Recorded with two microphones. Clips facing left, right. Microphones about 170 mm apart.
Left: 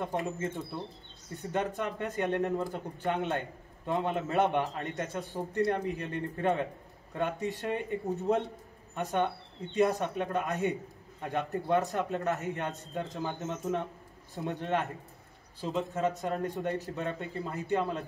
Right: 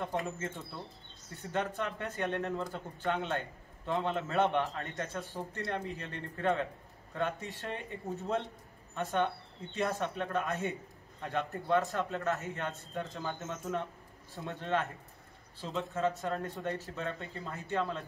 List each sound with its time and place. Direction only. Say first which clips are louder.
0.0 s a man's voice: left 3 dB; 15° left (ahead or behind)
15.9 s a man's voice: left 2 dB; 15° left (ahead or behind)